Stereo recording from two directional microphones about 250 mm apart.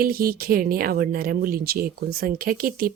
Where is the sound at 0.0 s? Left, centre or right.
Right.